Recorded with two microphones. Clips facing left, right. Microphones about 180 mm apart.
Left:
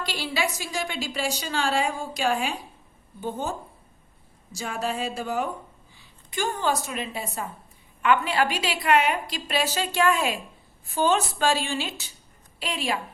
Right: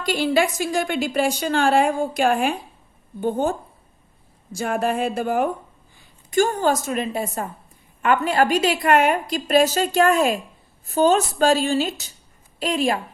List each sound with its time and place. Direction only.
0.0 s a woman's voice: 50° right (ahead or behind)
4.5 s a woman's voice: 55° right (ahead or behind)